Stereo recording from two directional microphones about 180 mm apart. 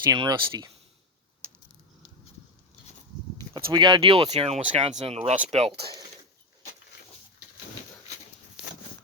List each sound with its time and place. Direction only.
0.1 s speech: 20° right (ahead or behind)
3.7 s speech: 25° right (ahead or behind)